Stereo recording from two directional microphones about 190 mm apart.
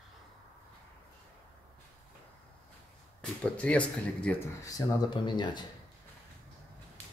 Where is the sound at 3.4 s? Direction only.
5° left (ahead or behind).